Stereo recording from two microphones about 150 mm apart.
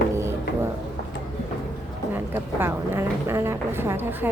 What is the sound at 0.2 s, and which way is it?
Music, 20° right (ahead or behind).